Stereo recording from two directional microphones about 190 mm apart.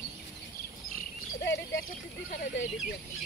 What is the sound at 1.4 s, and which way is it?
Speech, 65° left (ahead or behind).